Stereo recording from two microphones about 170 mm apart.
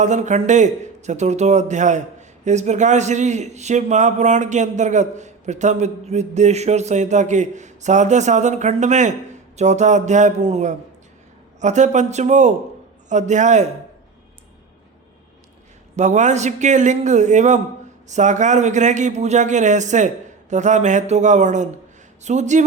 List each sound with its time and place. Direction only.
0.0 s a man's voice: 45° right (ahead or behind)
16.0 s a man's voice: 45° right (ahead or behind)